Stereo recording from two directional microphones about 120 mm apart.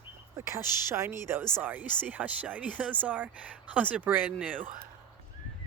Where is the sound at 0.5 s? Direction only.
20° right (ahead or behind).